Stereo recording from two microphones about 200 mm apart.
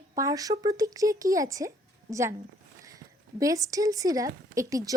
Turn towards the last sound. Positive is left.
turn(degrees=-15)  # may be behind; listen again after turning